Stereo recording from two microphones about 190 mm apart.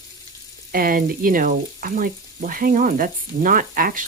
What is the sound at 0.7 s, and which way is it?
Speech, 50° right (ahead or behind).